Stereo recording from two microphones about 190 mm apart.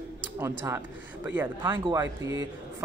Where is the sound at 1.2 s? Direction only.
10° right (ahead or behind).